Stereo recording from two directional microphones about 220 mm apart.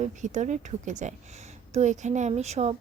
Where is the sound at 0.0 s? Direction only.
35° right (ahead or behind).